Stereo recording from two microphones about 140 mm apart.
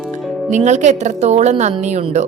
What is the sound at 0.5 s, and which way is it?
A woman's voice, 55° right (ahead or behind).